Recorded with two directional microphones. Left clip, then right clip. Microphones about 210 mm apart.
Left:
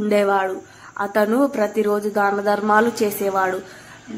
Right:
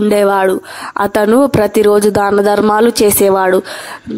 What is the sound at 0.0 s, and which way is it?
Speech, 45° right (ahead or behind).